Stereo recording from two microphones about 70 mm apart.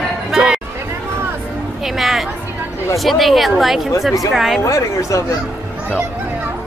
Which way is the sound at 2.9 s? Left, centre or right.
Centre.